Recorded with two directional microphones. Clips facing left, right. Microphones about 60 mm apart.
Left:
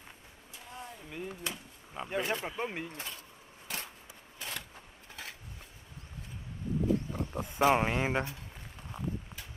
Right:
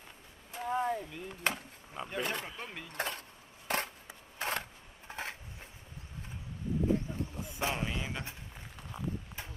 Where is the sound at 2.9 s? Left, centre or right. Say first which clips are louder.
Right 7 dB; right.